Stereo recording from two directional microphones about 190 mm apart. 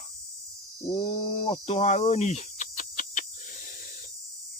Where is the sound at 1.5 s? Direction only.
30° left (ahead or behind).